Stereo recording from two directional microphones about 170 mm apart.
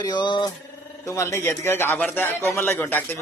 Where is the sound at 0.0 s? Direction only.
25° left (ahead or behind).